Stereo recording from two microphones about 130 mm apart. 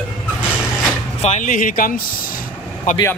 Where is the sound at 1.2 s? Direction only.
70° left (ahead or behind); by 2.0 s 90° left.